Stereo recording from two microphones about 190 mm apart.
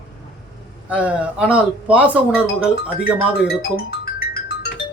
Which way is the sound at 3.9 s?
55° left (ahead or behind).